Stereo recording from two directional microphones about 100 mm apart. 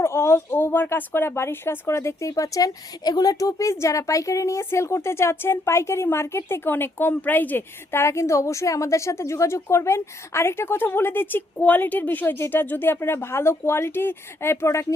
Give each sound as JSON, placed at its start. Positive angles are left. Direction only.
{"t": 0.0, "sound": "speech", "side_deg": 25}